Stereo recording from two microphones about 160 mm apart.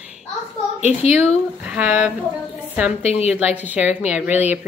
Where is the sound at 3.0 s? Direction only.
40° left (ahead or behind).